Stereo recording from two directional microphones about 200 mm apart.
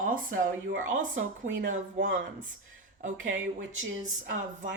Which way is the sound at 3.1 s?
75° right (ahead or behind).